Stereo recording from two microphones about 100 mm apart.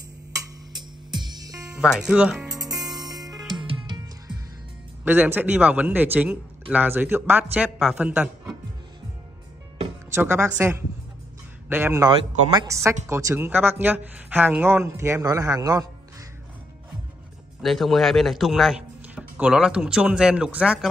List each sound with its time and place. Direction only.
0.7 s music: 45° right (ahead or behind)
1.8 s speech: 5° right (ahead or behind)
2.9 s music: centre (ahead or behind)
3.5 s music: 50° right (ahead or behind)
5.0 s speech: 20° right (ahead or behind)
10.1 s a woman's voice: 25° right (ahead or behind)
17.6 s a man's voice: centre (ahead or behind)